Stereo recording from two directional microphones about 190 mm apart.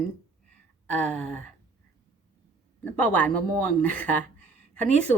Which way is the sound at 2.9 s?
5° left (ahead or behind).